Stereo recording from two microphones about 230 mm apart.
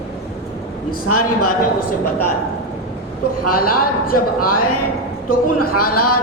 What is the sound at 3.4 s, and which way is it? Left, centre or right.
A man's voice, left.